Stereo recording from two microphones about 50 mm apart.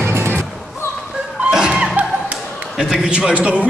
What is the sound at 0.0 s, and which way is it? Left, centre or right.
Music, right.